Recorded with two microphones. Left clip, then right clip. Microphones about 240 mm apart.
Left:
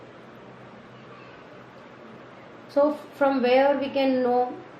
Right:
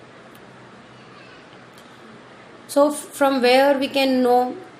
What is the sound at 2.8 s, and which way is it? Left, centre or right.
A woman's voice, right.